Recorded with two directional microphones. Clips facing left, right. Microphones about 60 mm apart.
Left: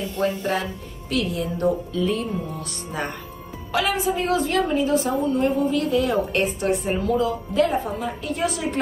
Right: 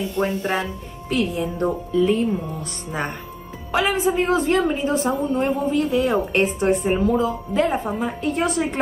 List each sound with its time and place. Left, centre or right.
0.2 s a woman's voice: right
3.7 s a woman's voice: right
7.8 s a woman's voice: right